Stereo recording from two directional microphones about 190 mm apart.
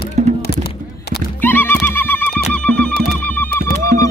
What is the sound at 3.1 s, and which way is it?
Music, 10° left (ahead or behind).